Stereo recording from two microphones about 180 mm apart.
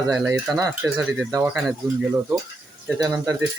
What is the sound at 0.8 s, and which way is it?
Speech, 5° right (ahead or behind).